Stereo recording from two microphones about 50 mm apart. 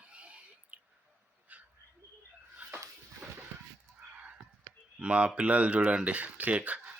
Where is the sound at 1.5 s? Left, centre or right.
Right.